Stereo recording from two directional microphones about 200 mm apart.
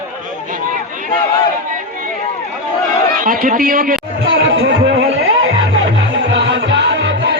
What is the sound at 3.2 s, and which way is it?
Speech, 45° right (ahead or behind).